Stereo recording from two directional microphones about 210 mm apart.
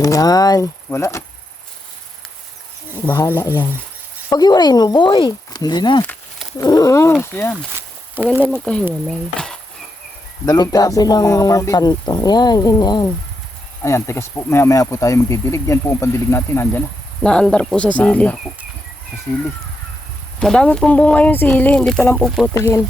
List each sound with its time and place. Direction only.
0.0 s speech: 15° left (ahead or behind)
3.1 s speech: 10° left (ahead or behind)
7.8 s a sound: 10° right (ahead or behind)
8.4 s speech: 10° right (ahead or behind)
10.4 s speech: 20° left (ahead or behind)
20.4 s speech: 5° left (ahead or behind)